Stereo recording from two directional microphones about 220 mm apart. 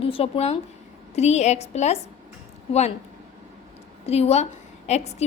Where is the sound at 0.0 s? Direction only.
25° left (ahead or behind).